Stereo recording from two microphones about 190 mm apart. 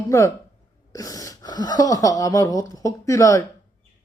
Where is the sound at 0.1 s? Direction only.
15° left (ahead or behind).